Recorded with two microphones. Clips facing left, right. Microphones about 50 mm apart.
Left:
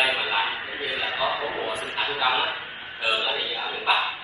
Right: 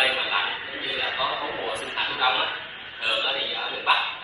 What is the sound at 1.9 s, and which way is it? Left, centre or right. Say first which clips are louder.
Speech: left 1 dB; left.